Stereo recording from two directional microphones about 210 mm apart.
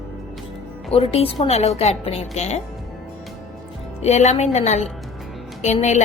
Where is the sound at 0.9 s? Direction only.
25° left (ahead or behind).